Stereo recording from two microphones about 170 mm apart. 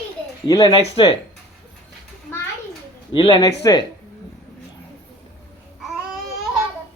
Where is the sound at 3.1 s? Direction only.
30° left (ahead or behind).